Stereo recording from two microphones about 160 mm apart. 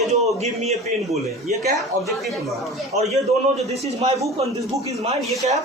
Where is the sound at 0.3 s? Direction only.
45° right (ahead or behind).